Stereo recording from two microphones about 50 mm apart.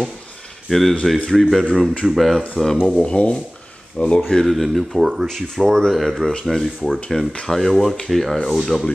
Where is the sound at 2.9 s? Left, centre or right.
Centre.